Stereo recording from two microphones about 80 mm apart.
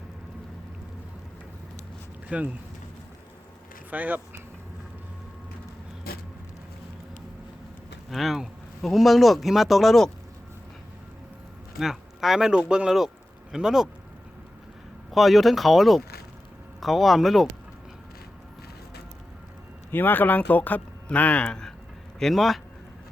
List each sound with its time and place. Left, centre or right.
2.3 s speech: centre
3.8 s speech: right
8.1 s speech: centre
11.8 s speech: centre
15.1 s speech: centre
19.9 s speech: left
22.2 s speech: centre